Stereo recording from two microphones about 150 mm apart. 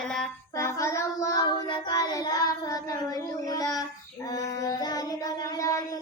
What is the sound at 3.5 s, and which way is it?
Child singing, 25° left (ahead or behind).